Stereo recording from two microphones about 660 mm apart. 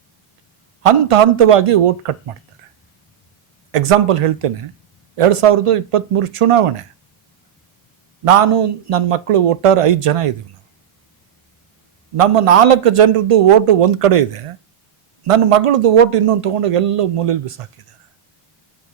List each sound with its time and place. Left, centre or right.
0.8 s a man's voice: right
3.7 s a man's voice: right
8.2 s a man's voice: right
12.1 s a man's voice: right
15.3 s a man's voice: right